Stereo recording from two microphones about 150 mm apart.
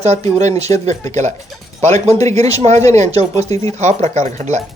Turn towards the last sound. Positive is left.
turn(degrees=-50)  # may be behind; listen again after turning